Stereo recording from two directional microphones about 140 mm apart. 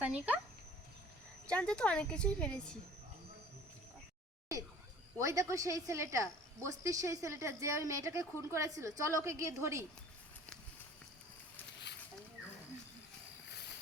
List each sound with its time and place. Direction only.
0.0 s speech: 10° right (ahead or behind)
1.5 s a woman's voice: 5° left (ahead or behind)
5.2 s speech: 20° right (ahead or behind)